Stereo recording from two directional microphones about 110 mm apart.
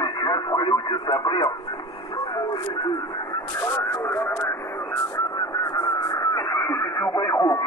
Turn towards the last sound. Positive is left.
turn(degrees=35)  # may be behind; listen again after turning